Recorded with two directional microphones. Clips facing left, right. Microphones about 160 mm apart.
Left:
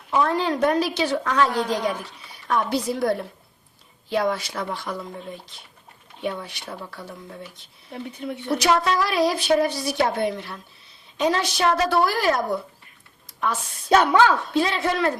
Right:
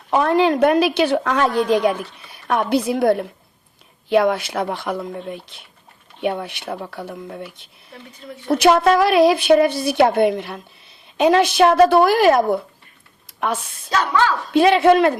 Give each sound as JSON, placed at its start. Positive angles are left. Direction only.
{"t": 0.1, "sound": "a woman's voice", "side_deg": -70}
{"t": 14.0, "sound": "a woman's voice", "side_deg": 55}
{"t": 14.5, "sound": "a woman's voice", "side_deg": -65}